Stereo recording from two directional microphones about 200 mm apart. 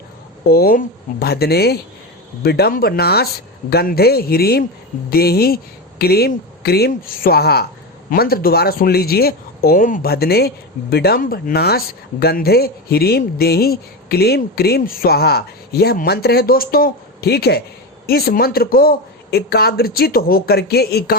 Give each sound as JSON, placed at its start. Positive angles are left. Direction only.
{"t": 0.4, "sound": "a man's voice", "side_deg": 50}